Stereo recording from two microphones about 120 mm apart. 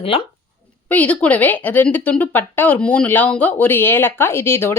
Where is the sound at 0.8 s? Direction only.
10° left (ahead or behind).